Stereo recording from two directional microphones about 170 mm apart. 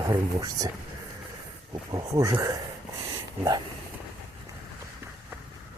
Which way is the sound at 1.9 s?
20° right (ahead or behind).